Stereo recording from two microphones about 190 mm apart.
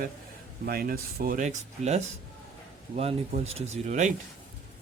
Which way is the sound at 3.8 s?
40° right (ahead or behind).